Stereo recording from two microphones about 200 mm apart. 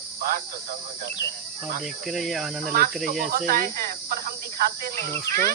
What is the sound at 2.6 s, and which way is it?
Speech, 45° right (ahead or behind).